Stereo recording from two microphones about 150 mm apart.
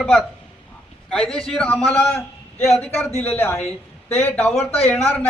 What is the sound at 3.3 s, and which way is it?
A man's voice, 15° left (ahead or behind).